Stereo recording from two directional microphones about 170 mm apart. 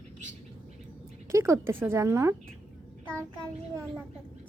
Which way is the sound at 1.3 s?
15° right (ahead or behind).